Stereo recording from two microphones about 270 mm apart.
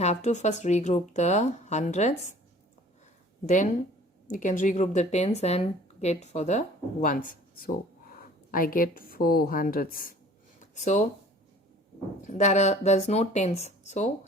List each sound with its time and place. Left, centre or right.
0.0 s speech: left
3.4 s speech: left
8.4 s a woman's voice: left
10.6 s a sound: left
12.2 s speech: left